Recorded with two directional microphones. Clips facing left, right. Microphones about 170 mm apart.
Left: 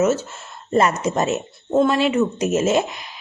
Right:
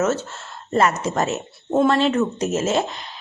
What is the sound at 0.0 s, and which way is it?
Speech, 10° left (ahead or behind).